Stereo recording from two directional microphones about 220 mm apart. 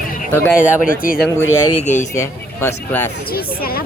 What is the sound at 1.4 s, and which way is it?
Speech, 75° left (ahead or behind).